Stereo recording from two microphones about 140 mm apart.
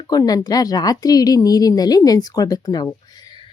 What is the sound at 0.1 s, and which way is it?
Speech, 25° left (ahead or behind).